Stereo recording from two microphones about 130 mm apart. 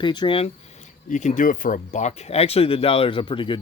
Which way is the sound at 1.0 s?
75° left (ahead or behind).